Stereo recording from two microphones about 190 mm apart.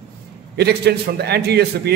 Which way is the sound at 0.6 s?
60° right (ahead or behind).